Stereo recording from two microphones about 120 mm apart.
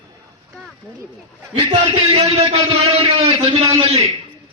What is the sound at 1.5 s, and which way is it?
A man's voice, 50° right (ahead or behind).